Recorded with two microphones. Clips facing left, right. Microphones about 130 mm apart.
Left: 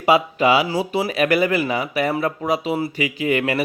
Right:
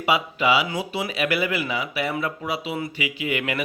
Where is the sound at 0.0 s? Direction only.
40° left (ahead or behind).